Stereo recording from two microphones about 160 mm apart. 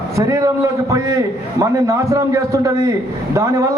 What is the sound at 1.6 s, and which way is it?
A man's voice, 20° right (ahead or behind).